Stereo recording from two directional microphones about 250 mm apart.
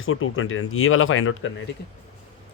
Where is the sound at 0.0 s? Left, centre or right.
Left.